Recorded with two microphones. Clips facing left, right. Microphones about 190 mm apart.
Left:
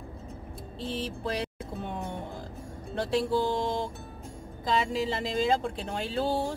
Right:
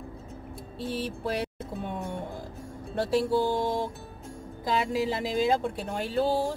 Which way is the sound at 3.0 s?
5° right (ahead or behind).